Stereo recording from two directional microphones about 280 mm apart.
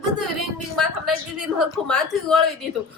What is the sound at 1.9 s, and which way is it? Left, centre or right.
Speech, centre.